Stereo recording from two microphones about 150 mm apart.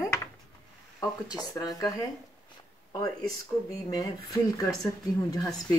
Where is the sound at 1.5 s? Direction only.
25° left (ahead or behind).